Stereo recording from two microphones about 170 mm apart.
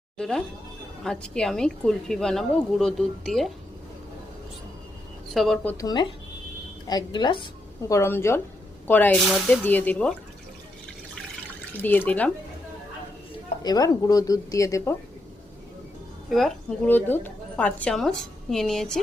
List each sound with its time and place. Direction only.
0.2 s a woman's voice: 5° left (ahead or behind)
5.3 s a woman's voice: centre (ahead or behind)
5.6 s speech: 20° left (ahead or behind)
7.9 s speech: 15° left (ahead or behind)
9.2 s a woman's voice: centre (ahead or behind)
9.6 s speech: 10° left (ahead or behind)
11.7 s speech: 10° left (ahead or behind)
13.6 s speech: 20° left (ahead or behind)
16.3 s a woman's voice: centre (ahead or behind)
16.9 s a woman's voice: 10° left (ahead or behind)